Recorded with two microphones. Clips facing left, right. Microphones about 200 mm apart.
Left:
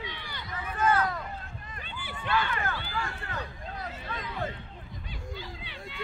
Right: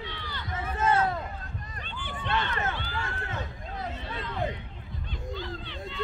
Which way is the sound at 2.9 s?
20° right (ahead or behind).